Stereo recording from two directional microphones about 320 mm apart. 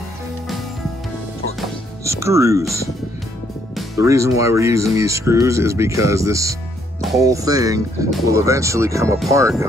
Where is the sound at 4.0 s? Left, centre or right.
Centre.